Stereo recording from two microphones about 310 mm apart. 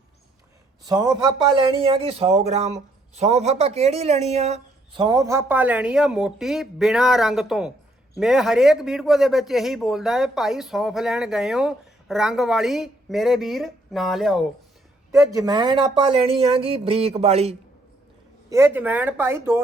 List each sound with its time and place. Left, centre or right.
0.9 s a man's voice: centre
18.5 s a man's voice: centre